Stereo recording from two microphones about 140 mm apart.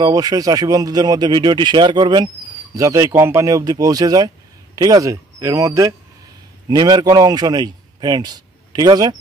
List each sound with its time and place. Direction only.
0.0 s a man's voice: 25° right (ahead or behind)